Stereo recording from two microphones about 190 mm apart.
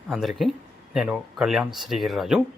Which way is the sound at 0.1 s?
Centre (ahead or behind).